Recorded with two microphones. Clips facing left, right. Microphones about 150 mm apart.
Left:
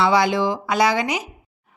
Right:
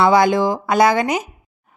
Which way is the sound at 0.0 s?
50° right (ahead or behind).